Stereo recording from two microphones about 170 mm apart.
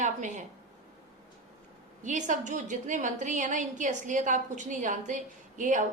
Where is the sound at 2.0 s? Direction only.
45° right (ahead or behind).